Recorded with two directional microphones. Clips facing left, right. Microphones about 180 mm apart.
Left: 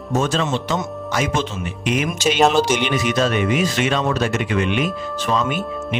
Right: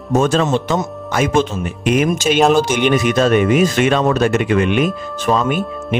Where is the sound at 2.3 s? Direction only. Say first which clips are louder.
Right 3 dB; centre (ahead or behind).